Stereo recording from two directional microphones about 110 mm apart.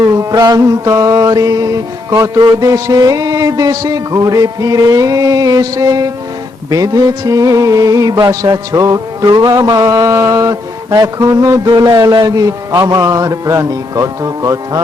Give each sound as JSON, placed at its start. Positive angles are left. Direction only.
{"t": 0.1, "sound": "music", "side_deg": -30}